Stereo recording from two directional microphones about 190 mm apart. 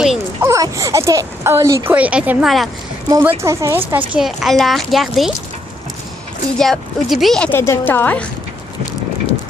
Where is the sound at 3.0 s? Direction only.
15° right (ahead or behind); by 5.3 s centre (ahead or behind).